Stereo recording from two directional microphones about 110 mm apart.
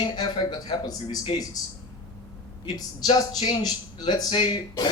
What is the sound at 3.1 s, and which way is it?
Speech, 35° left (ahead or behind).